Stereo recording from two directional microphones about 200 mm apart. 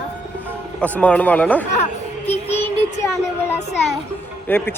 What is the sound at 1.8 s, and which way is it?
Music, 35° left (ahead or behind).